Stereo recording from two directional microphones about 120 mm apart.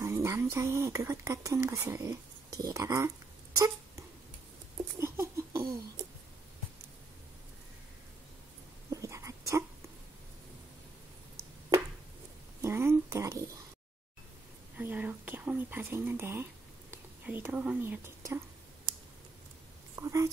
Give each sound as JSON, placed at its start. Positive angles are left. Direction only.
{"t": 0.0, "sound": "speech", "side_deg": -20}
{"t": 3.5, "sound": "a sound", "side_deg": -25}
{"t": 4.9, "sound": "laughter", "side_deg": -20}
{"t": 8.9, "sound": "whispering", "side_deg": -25}
{"t": 12.6, "sound": "speech", "side_deg": -20}
{"t": 14.8, "sound": "speech", "side_deg": -15}
{"t": 20.0, "sound": "laughter", "side_deg": -25}